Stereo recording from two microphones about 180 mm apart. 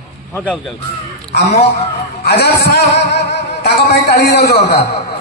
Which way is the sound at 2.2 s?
60° left (ahead or behind).